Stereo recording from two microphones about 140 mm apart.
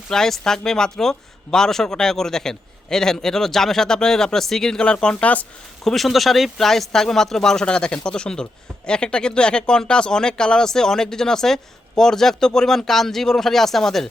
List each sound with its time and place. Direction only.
0.1 s speech: 5° left (ahead or behind)